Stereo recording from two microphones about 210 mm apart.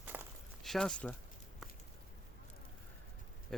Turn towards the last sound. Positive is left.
turn(degrees=0)  # may be behind; listen again after turning